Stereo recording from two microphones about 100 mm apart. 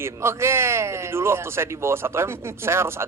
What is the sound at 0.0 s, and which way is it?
A man's voice, 25° right (ahead or behind).